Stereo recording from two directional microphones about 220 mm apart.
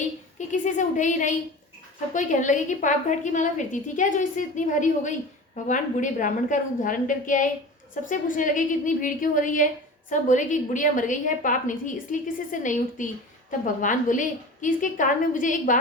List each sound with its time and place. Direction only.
0.3 s a woman's voice: 35° left (ahead or behind)